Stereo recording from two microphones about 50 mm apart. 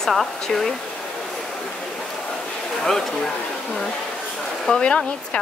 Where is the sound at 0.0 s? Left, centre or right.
Centre.